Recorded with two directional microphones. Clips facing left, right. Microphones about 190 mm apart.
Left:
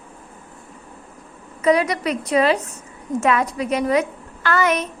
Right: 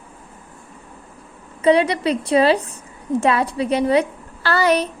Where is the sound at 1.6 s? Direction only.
30° right (ahead or behind).